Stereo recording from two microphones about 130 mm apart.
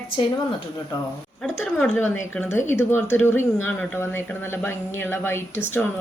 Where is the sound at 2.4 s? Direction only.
20° left (ahead or behind).